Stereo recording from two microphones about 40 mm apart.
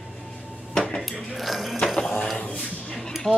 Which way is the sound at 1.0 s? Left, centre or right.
Centre.